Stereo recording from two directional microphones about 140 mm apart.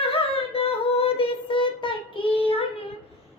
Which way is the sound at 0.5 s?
45° left (ahead or behind).